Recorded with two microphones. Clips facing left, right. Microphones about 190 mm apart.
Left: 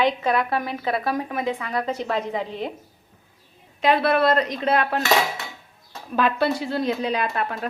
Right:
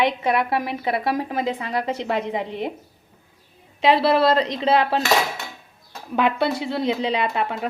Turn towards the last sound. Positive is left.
turn(degrees=-20)  # may be behind; listen again after turning